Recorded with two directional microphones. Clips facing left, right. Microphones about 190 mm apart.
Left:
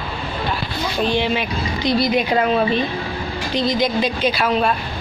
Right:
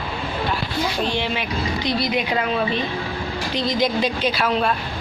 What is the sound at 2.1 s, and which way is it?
Speech, 45° left (ahead or behind).